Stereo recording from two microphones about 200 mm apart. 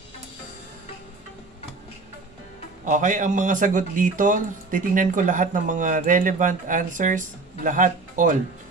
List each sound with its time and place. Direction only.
2.8 s a man's voice: 40° right (ahead or behind)